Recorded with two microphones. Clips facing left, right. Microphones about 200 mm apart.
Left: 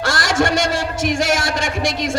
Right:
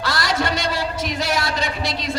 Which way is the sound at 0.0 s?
45° left (ahead or behind).